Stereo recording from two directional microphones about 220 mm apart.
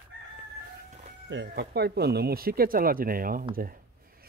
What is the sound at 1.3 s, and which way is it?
Speech, 45° right (ahead or behind).